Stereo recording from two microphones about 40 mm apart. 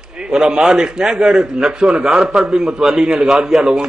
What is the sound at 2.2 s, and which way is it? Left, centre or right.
Speech, centre.